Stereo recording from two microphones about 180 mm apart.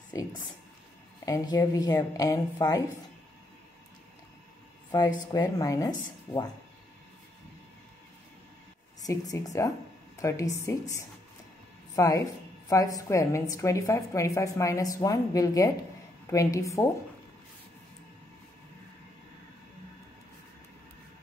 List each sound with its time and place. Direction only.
0.1 s a woman's voice: 20° left (ahead or behind)
4.9 s a woman's voice: 20° left (ahead or behind)
9.0 s a woman's voice: 20° left (ahead or behind)